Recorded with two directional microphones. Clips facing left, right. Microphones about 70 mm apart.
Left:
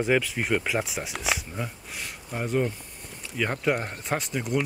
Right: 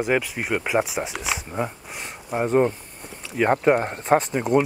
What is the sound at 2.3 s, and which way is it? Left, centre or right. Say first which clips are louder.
Speech: right 7 dB; right.